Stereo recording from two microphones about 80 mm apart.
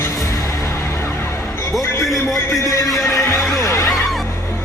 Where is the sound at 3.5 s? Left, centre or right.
Left.